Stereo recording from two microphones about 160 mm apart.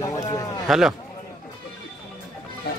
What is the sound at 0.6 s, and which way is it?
Speech, centre (ahead or behind).